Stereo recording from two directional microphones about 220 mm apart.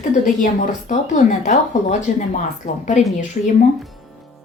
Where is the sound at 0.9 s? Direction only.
35° left (ahead or behind).